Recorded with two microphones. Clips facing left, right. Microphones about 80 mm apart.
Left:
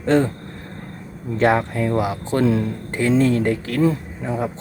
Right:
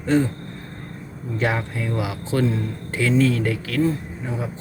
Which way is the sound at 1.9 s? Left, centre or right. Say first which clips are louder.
Left 3 dB; left.